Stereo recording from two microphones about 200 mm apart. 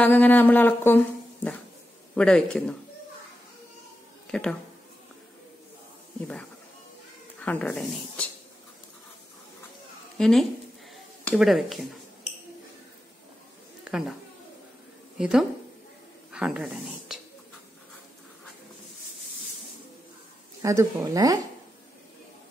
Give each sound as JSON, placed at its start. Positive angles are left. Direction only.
{"t": 0.0, "sound": "speech", "side_deg": 10}
{"t": 4.3, "sound": "speech", "side_deg": 5}
{"t": 7.3, "sound": "speech", "side_deg": 5}
{"t": 10.1, "sound": "a woman's voice", "side_deg": 0}
{"t": 13.8, "sound": "a woman's voice", "side_deg": -5}
{"t": 15.1, "sound": "speech", "side_deg": -5}
{"t": 20.6, "sound": "speech", "side_deg": -15}